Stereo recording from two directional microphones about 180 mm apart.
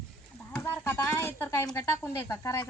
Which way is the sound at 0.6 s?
15° left (ahead or behind).